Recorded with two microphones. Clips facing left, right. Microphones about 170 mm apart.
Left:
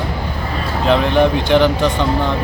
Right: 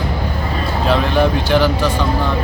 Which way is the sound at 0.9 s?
20° left (ahead or behind).